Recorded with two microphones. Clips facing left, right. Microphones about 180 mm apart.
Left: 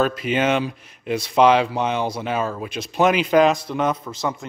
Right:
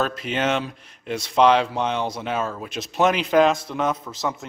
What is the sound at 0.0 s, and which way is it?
Speech, 5° left (ahead or behind).